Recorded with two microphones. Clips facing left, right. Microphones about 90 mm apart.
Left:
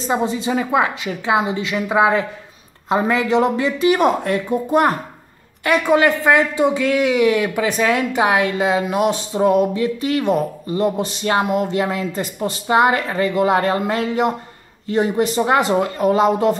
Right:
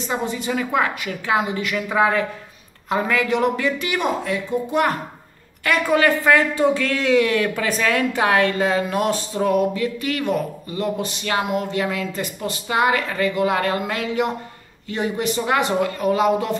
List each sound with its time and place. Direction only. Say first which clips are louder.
0.0 s speech: left 5 dB; 30° left (ahead or behind)
4.0 s speech: left 6 dB; 50° left (ahead or behind)
5.6 s speech: left 3 dB; 20° left (ahead or behind)